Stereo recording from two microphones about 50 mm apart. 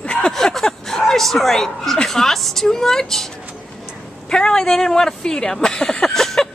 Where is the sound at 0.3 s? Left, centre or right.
Centre.